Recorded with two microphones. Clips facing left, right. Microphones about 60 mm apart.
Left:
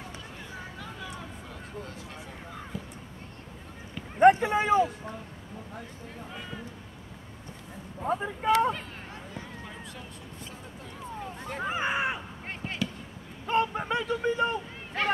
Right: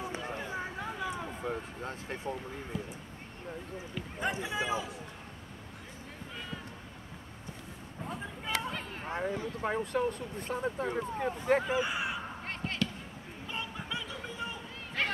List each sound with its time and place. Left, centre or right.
0.4 s a sound: right
1.4 s a sound: right
4.2 s speech: left
8.1 s speech: left
9.6 s speech: right
11.6 s speech: left
12.6 s basketball bounce: centre
13.5 s speech: left